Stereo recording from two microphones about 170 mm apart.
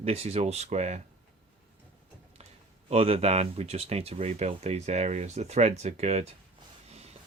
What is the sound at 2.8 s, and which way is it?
Speech, 35° right (ahead or behind).